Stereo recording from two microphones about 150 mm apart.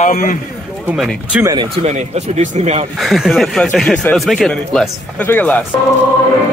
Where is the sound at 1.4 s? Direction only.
25° right (ahead or behind).